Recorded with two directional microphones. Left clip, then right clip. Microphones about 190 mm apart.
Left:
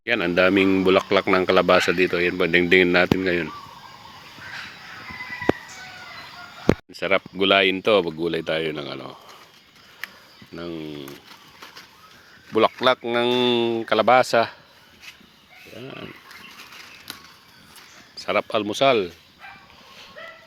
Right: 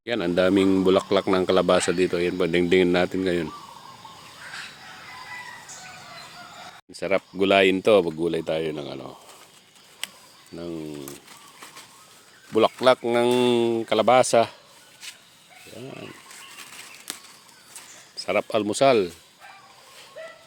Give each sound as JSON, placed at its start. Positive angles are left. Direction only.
{"t": 0.0, "sound": "speech", "side_deg": -5}
{"t": 6.9, "sound": "speech", "side_deg": -5}
{"t": 10.5, "sound": "speech", "side_deg": 0}
{"t": 12.5, "sound": "speech", "side_deg": -5}
{"t": 15.7, "sound": "speech", "side_deg": 0}
{"t": 18.2, "sound": "speech", "side_deg": -10}